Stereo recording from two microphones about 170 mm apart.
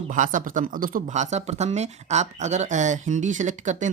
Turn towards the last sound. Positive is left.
turn(degrees=-45)  # may be behind; listen again after turning